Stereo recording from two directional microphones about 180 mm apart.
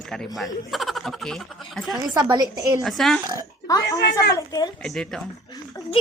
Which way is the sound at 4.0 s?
70° left (ahead or behind).